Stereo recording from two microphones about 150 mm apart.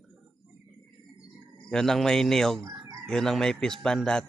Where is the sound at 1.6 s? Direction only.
Centre (ahead or behind).